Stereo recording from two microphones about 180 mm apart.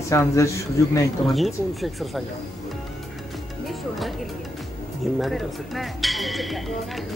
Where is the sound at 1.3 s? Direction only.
Centre (ahead or behind).